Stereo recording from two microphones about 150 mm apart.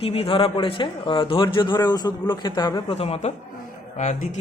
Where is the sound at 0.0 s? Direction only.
40° left (ahead or behind).